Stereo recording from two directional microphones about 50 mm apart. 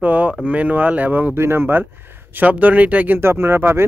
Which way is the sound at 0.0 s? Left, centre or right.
Right.